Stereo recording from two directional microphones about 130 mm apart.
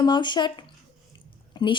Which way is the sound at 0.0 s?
35° left (ahead or behind).